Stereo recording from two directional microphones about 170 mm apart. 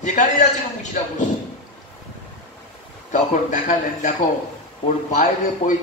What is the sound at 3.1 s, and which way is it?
A man's voice, 45° left (ahead or behind).